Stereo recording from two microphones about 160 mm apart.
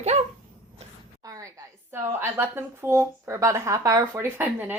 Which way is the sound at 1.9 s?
15° right (ahead or behind).